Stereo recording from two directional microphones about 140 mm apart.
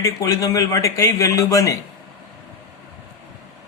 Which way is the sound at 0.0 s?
20° left (ahead or behind).